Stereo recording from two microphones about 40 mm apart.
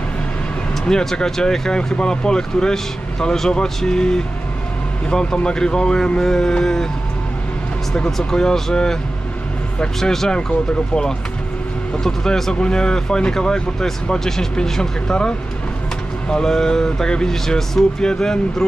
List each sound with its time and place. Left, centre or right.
0.8 s speech: centre
5.3 s speech: centre
7.9 s speech: centre
9.9 s speech: centre
12.0 s speech: centre
12.5 s speech: left